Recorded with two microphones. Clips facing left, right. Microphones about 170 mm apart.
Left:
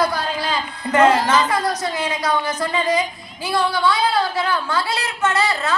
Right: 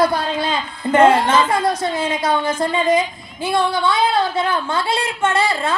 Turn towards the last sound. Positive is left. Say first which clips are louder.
# right 2 dB
turn(degrees=-25)  # may be behind; listen again after turning